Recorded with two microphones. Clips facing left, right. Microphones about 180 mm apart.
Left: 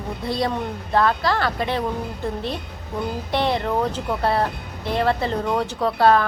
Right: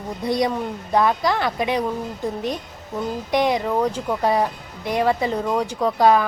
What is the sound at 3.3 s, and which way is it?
A woman's voice, 15° right (ahead or behind).